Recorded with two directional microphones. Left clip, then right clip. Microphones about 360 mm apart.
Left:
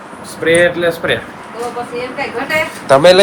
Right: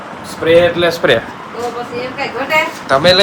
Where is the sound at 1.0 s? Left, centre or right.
Right.